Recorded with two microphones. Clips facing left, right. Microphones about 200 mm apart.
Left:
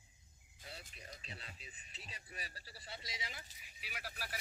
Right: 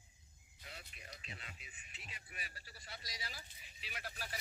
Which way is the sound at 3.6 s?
10° left (ahead or behind).